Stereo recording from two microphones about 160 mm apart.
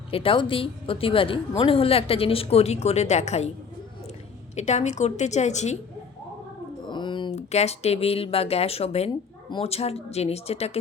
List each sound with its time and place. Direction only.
0.1 s a woman's voice: 35° left (ahead or behind)
4.5 s a woman's voice: 45° left (ahead or behind)
6.8 s a sound: 30° left (ahead or behind)
7.3 s a woman's voice: 45° left (ahead or behind)